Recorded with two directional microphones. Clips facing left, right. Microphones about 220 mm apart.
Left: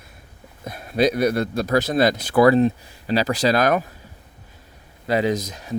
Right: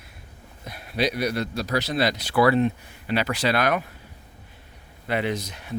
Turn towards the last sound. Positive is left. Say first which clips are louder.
# left 5 dB
turn(degrees=40)  # may be behind; listen again after turning